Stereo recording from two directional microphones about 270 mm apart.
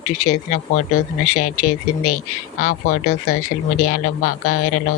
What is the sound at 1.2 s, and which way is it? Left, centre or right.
Speech, left.